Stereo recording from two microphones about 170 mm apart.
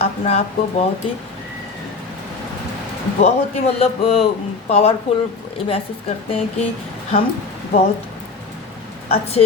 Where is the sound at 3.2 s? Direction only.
35° left (ahead or behind).